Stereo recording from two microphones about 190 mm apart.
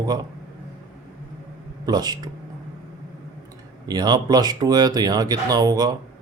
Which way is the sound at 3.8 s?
20° right (ahead or behind).